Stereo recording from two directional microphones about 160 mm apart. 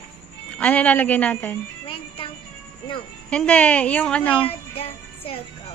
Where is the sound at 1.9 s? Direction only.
35° left (ahead or behind).